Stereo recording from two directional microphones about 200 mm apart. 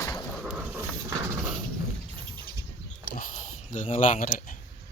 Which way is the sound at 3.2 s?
40° left (ahead or behind).